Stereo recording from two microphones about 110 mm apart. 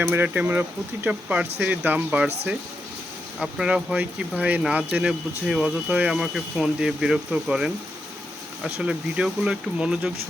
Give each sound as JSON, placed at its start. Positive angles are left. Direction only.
{"t": 0.0, "sound": "speech", "side_deg": -20}